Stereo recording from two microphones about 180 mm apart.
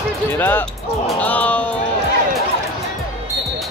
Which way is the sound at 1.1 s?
10° left (ahead or behind).